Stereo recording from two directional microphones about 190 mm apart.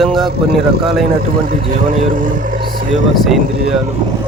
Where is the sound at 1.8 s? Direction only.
45° right (ahead or behind).